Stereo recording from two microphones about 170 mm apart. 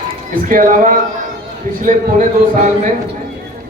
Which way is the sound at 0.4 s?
50° right (ahead or behind).